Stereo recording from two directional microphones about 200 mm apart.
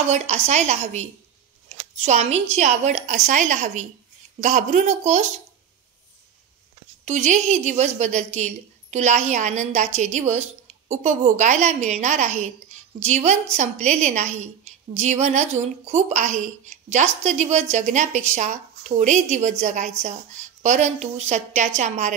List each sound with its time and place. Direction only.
0.0 s a woman's voice: 35° right (ahead or behind)
7.1 s a woman's voice: 35° right (ahead or behind)